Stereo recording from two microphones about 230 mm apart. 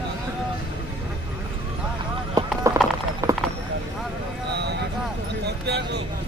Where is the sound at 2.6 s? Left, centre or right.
Centre.